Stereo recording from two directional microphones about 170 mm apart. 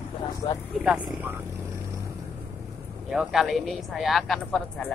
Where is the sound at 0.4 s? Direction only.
30° left (ahead or behind).